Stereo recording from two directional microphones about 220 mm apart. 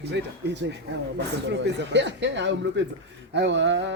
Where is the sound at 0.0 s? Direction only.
50° right (ahead or behind).